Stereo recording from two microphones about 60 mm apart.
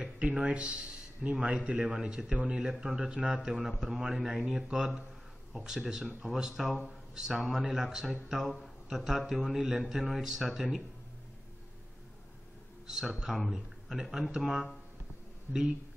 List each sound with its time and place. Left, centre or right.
0.0 s a sound: centre
1.3 s speech: centre
12.8 s a man's voice: centre